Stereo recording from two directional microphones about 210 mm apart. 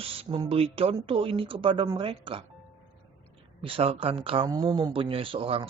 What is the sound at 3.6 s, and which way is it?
Speech, 25° right (ahead or behind).